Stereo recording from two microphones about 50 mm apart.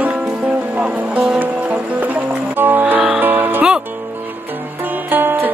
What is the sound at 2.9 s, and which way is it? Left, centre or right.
Music, right.